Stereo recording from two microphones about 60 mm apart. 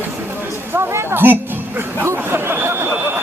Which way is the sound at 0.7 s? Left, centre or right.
Right.